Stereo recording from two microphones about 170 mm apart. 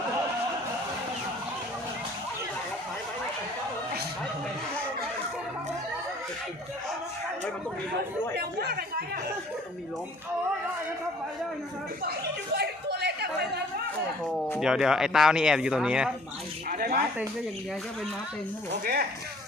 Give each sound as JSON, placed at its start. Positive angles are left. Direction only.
{"t": 8.4, "sound": "speech", "side_deg": -70}
{"t": 12.5, "sound": "chatter", "side_deg": -70}
{"t": 14.6, "sound": "speech", "side_deg": -5}
{"t": 16.6, "sound": "a sound", "side_deg": -55}
{"t": 18.7, "sound": "speech", "side_deg": -70}